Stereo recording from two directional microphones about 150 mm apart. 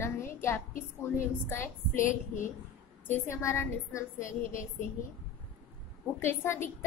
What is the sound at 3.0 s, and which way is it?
A woman's voice, 15° left (ahead or behind).